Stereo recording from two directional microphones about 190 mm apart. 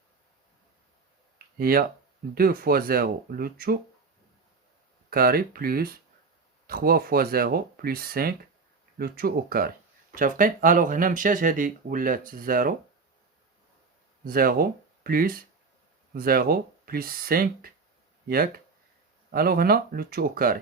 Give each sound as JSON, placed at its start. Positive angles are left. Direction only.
{"t": 1.5, "sound": "speech", "side_deg": -50}
{"t": 5.1, "sound": "speech", "side_deg": -50}
{"t": 14.3, "sound": "speech", "side_deg": -50}